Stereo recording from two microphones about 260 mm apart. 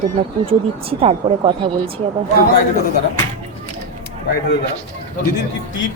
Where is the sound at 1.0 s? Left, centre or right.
Right.